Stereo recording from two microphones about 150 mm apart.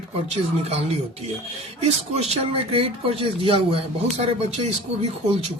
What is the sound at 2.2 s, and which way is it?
Speech, 40° right (ahead or behind).